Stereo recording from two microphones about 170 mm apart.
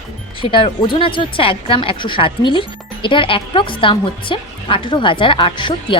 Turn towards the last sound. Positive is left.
turn(degrees=30)  # may be behind; listen again after turning